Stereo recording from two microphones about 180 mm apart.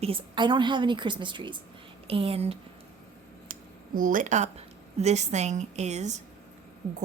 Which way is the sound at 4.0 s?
45° right (ahead or behind).